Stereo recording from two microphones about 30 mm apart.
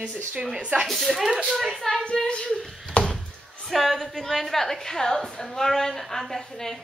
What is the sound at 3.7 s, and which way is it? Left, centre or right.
A woman's voice, centre.